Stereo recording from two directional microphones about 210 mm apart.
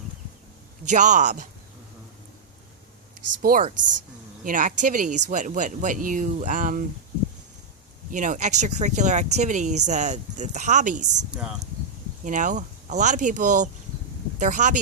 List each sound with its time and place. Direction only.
0.9 s speech: 35° right (ahead or behind)
3.4 s speech: 40° right (ahead or behind)
8.1 s speech: 35° right (ahead or behind)
11.3 s speech: 5° right (ahead or behind)
12.2 s speech: 35° right (ahead or behind)